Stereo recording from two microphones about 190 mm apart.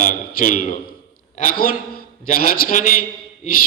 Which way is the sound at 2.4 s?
45° left (ahead or behind).